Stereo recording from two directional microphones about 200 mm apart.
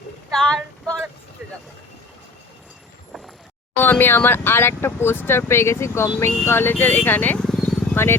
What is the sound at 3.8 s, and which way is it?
Speech, 10° left (ahead or behind).